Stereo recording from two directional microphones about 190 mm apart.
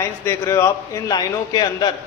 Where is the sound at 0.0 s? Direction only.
15° left (ahead or behind).